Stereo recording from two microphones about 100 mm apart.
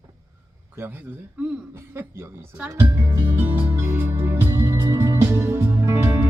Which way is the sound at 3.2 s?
20° right (ahead or behind).